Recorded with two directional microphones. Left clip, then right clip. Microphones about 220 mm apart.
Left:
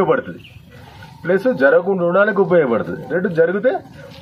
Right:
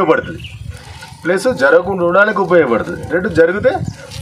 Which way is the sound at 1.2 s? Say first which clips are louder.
Right 2 dB; 35° right (ahead or behind).